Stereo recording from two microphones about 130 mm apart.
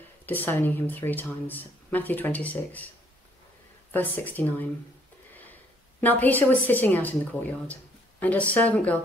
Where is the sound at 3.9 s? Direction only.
15° left (ahead or behind).